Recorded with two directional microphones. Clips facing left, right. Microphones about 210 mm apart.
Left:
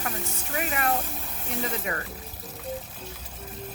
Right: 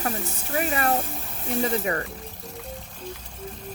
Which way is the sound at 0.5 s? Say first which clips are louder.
Right 4 dB; 35° right (ahead or behind).